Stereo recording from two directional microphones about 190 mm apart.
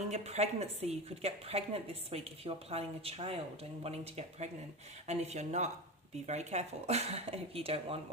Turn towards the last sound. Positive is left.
turn(degrees=-30)  # may be behind; listen again after turning